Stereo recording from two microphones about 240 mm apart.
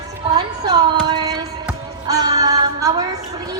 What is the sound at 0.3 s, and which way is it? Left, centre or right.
Speech, centre.